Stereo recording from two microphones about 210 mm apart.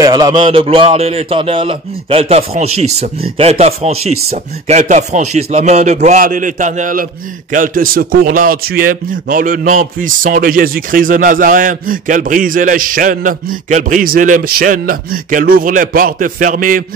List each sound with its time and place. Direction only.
0.0 s a man's voice: 20° right (ahead or behind); by 16.8 s 40° right (ahead or behind)